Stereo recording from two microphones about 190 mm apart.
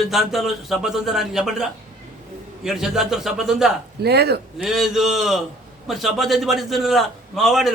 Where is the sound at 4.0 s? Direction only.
60° right (ahead or behind).